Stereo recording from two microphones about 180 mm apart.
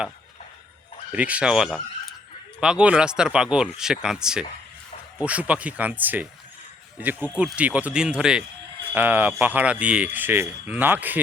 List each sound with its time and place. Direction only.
1.1 s speech: 5° right (ahead or behind)